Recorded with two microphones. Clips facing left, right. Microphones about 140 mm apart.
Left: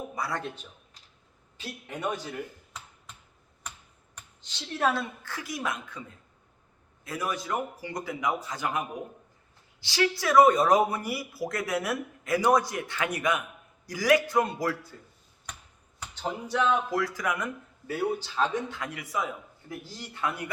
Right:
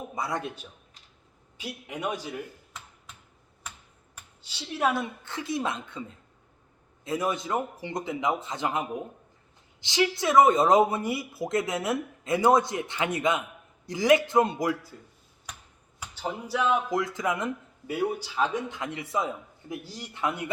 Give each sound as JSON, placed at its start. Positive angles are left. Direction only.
{"t": 0.2, "sound": "speech", "side_deg": -20}
{"t": 1.5, "sound": "speech", "side_deg": -10}
{"t": 4.1, "sound": "speech", "side_deg": -5}
{"t": 7.0, "sound": "speech", "side_deg": -25}
{"t": 16.0, "sound": "speech", "side_deg": -5}
{"t": 16.9, "sound": "speech", "side_deg": -20}
{"t": 17.8, "sound": "a man's voice", "side_deg": -10}